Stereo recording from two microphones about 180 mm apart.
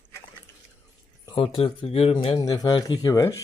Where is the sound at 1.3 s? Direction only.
30° left (ahead or behind).